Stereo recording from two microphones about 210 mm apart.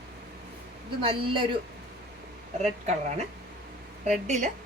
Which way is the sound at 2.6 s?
30° right (ahead or behind).